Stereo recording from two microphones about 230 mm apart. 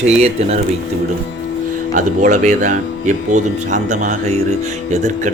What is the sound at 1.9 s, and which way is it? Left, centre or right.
Speech, right.